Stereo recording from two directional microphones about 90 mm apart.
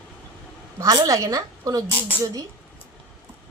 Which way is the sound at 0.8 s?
40° right (ahead or behind).